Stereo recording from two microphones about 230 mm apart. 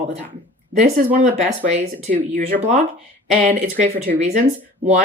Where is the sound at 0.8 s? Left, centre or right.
Right.